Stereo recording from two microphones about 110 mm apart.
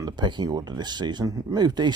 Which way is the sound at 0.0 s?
40° right (ahead or behind).